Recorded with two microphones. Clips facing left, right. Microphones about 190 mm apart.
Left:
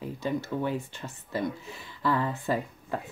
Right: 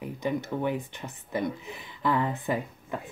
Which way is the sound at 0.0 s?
15° right (ahead or behind).